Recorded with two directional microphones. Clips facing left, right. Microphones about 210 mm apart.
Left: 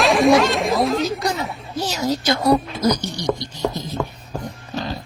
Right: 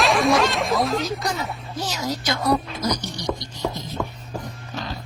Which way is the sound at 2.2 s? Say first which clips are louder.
Left 5 dB; 35° left (ahead or behind).